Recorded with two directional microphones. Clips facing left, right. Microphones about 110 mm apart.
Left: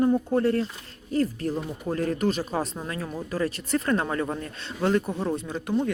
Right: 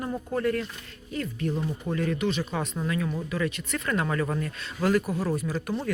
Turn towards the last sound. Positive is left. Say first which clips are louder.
# left 1 dB
turn(degrees=20)  # may be behind; listen again after turning